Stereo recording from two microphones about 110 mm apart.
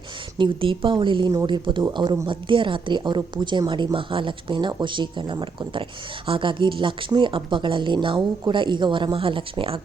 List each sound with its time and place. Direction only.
0.3 s speech: 50° right (ahead or behind)
1.3 s speech: 35° right (ahead or behind); by 9.8 s 55° right (ahead or behind)